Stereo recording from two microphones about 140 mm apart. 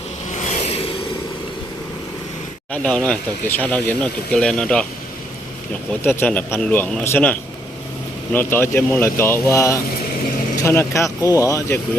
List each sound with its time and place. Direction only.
0.3 s a sound: 55° left (ahead or behind)
2.7 s speech: 5° left (ahead or behind)
6.1 s speech: 15° left (ahead or behind)